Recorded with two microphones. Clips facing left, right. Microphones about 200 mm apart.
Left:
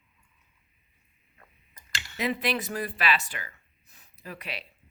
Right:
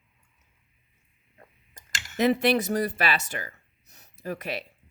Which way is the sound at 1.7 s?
45° right (ahead or behind).